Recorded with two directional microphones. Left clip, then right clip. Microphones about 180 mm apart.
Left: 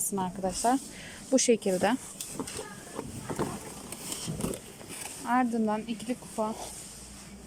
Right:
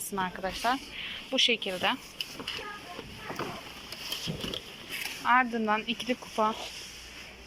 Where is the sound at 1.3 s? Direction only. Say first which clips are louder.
Left 1 dB; 45° left (ahead or behind).